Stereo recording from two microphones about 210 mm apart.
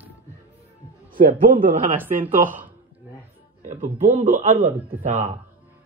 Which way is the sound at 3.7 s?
35° right (ahead or behind).